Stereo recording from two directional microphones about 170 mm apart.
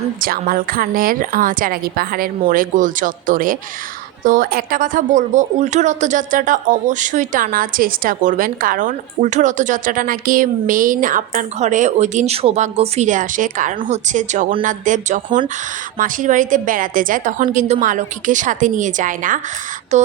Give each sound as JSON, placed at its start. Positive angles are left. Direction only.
{"t": 0.2, "sound": "a woman's voice", "side_deg": -55}